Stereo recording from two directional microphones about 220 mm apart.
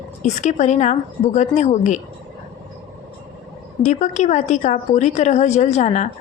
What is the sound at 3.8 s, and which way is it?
A woman's voice, 35° left (ahead or behind).